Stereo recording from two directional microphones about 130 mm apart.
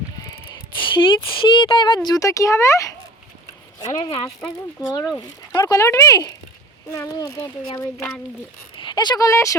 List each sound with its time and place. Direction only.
0.8 s speech: 40° left (ahead or behind)
2.0 s speech: 25° left (ahead or behind)
4.4 s speech: 5° left (ahead or behind)
5.1 s speech: 25° left (ahead or behind)
8.7 s speech: 35° left (ahead or behind)